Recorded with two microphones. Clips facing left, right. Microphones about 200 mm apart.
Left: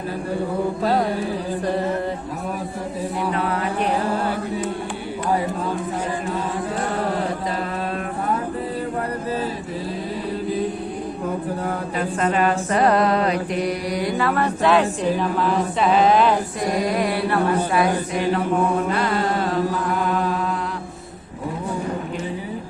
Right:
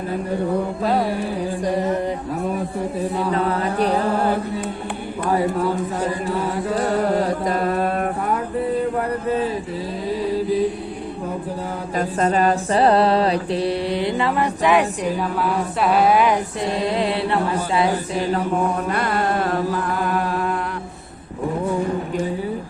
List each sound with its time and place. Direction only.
3.3 s music: 35° right (ahead or behind)
7.4 s carnatic music: 50° right (ahead or behind)
12.2 s mantra: 35° right (ahead or behind); by 16.4 s 10° right (ahead or behind)
16.6 s music: 25° right (ahead or behind)
18.9 s music: 55° right (ahead or behind)